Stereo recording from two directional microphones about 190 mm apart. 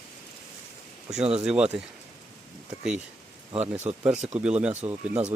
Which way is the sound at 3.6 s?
10° right (ahead or behind).